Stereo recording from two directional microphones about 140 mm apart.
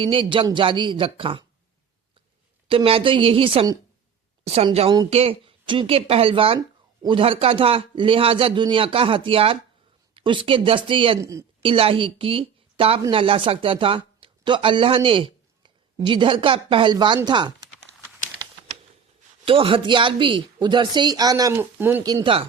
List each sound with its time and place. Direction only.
0.0 s a woman's voice: 40° right (ahead or behind)
2.6 s a woman's voice: 40° right (ahead or behind)
6.6 s a sound: 30° right (ahead or behind)
7.2 s a woman's voice: 45° right (ahead or behind)
11.2 s speech: 20° right (ahead or behind)
11.6 s a woman's voice: 40° right (ahead or behind)
19.5 s a woman's voice: 40° right (ahead or behind); by 22.0 s 15° right (ahead or behind)
22.0 s speech: 25° right (ahead or behind)